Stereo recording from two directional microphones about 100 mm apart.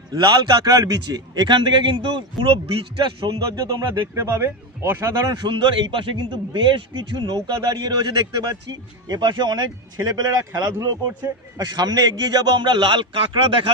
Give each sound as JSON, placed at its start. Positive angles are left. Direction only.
{"t": 0.1, "sound": "a man's voice", "side_deg": -45}
{"t": 3.4, "sound": "a man's voice", "side_deg": -35}
{"t": 5.0, "sound": "speech", "side_deg": -40}
{"t": 5.5, "sound": "a man's voice", "side_deg": -55}
{"t": 10.5, "sound": "a man's voice", "side_deg": -35}